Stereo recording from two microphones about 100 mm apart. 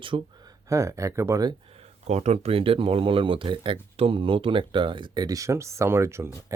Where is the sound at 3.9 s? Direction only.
75° right (ahead or behind).